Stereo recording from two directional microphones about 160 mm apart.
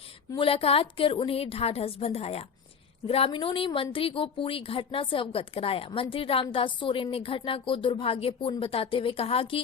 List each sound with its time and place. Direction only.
0.3 s a woman's voice: 35° left (ahead or behind)